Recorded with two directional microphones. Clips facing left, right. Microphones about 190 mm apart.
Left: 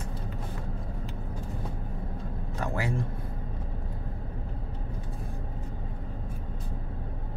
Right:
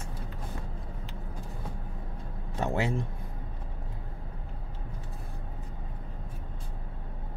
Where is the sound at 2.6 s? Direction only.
25° right (ahead or behind).